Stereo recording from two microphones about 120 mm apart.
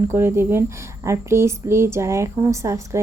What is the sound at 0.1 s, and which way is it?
A woman's voice, 20° right (ahead or behind).